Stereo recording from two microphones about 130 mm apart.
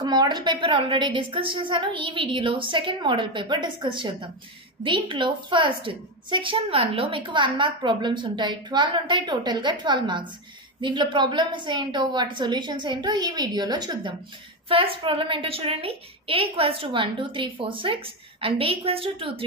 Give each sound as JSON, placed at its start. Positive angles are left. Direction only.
{"t": 0.0, "sound": "a woman's voice", "side_deg": -30}
{"t": 14.7, "sound": "a woman's voice", "side_deg": -45}